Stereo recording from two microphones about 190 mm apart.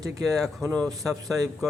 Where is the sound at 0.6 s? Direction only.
20° right (ahead or behind).